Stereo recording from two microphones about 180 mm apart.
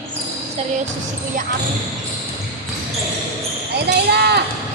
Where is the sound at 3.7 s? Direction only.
65° right (ahead or behind).